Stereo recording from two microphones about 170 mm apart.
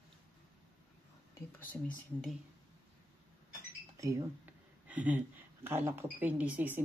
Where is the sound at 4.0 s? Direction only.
15° right (ahead or behind).